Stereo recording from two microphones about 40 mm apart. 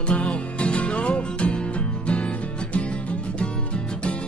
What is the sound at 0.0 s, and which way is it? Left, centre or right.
Music, left.